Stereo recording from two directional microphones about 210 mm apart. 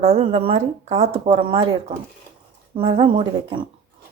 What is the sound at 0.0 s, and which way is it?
Speech, 30° right (ahead or behind).